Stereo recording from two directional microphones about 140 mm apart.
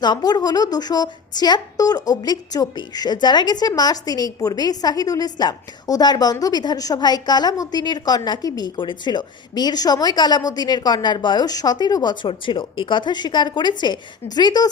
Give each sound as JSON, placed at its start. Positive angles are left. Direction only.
{"t": 0.0, "sound": "a woman's voice", "side_deg": 30}